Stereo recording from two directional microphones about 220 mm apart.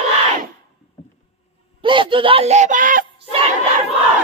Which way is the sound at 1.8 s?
20° right (ahead or behind).